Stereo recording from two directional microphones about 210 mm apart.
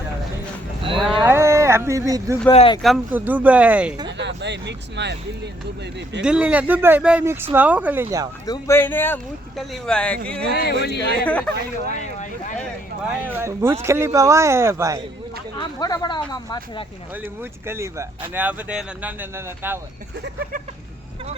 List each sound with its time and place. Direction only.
0.9 s a sound: 25° right (ahead or behind)
1.2 s a sound: 10° right (ahead or behind)
2.5 s speech: 25° left (ahead or behind)
2.8 s speech: 5° right (ahead or behind)
4.2 s a sound: 55° right (ahead or behind)
6.2 s speech: 5° right (ahead or behind)
8.4 s speech: 15° left (ahead or behind)
10.5 s speech: 50° left (ahead or behind)
11.3 s speech: 5° left (ahead or behind)
11.9 s a sound: 35° left (ahead or behind)
13.2 s speech: 10° right (ahead or behind)
15.5 s speech: 20° left (ahead or behind)
17.2 s speech: 10° right (ahead or behind)